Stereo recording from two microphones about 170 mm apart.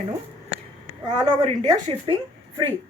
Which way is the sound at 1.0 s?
25° right (ahead or behind).